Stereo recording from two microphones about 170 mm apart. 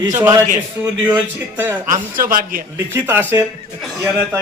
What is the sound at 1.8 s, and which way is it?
Speech, 50° right (ahead or behind).